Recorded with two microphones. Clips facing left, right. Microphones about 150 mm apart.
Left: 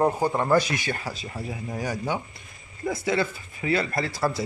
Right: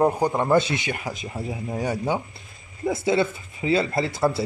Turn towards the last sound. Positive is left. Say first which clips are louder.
# right 4 dB
turn(degrees=-20)  # may be behind; listen again after turning